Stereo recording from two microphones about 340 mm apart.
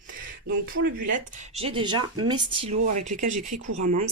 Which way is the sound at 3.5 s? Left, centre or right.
Right.